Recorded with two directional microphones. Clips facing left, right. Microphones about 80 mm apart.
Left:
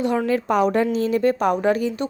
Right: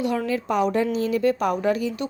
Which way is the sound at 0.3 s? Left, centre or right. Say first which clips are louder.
Left 3 dB; left.